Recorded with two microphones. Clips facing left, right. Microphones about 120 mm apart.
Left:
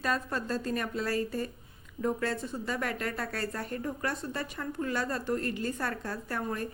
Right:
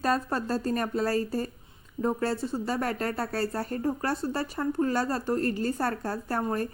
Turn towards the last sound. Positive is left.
turn(degrees=-40)  # may be behind; listen again after turning